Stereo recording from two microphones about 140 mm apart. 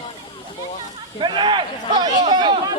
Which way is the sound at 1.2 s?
35° right (ahead or behind).